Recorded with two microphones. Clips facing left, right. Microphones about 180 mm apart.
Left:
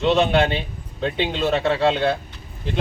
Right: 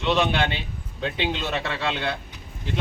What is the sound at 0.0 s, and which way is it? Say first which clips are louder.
Speech: left 5 dB; 30° left (ahead or behind).